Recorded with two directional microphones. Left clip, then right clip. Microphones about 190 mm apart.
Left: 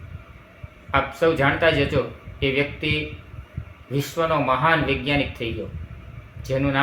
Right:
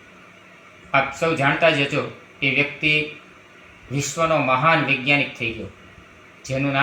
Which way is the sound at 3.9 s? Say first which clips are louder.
Right 2 dB; 20° left (ahead or behind).